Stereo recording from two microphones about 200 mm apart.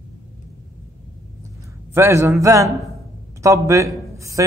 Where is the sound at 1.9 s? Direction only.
15° right (ahead or behind).